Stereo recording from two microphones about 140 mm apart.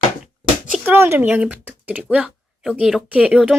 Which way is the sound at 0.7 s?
15° right (ahead or behind).